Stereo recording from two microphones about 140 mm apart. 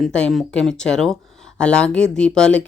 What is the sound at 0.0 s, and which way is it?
Speech, 5° left (ahead or behind).